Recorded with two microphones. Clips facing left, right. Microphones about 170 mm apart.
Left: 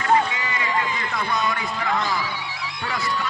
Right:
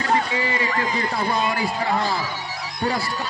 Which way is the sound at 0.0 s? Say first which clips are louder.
Left 1 dB; 35° right (ahead or behind).